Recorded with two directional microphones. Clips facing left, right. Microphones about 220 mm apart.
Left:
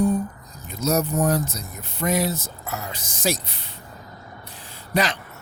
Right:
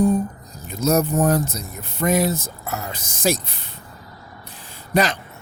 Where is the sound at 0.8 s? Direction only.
50° right (ahead or behind).